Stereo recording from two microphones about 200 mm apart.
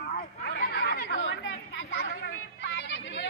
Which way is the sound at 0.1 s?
45° left (ahead or behind).